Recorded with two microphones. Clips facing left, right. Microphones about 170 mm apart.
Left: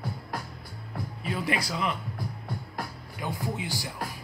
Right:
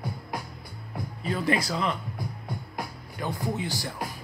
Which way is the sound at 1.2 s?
5° left (ahead or behind).